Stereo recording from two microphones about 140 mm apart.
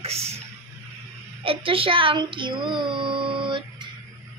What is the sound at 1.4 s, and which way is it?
Child singing, 40° right (ahead or behind).